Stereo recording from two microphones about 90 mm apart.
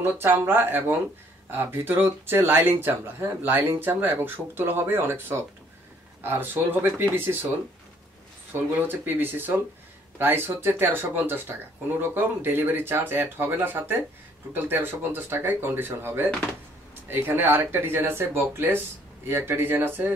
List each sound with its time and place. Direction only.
0.0 s speech: 20° right (ahead or behind)
8.5 s speech: 20° right (ahead or behind)